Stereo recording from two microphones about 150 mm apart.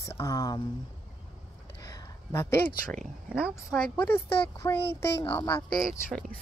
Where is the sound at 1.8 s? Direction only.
20° left (ahead or behind).